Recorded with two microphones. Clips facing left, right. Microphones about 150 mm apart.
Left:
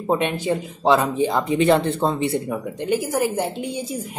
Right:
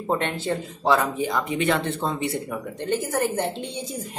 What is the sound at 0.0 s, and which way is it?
A woman's voice, 15° left (ahead or behind).